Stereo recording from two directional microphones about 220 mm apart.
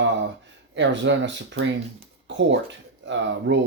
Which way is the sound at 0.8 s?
55° right (ahead or behind).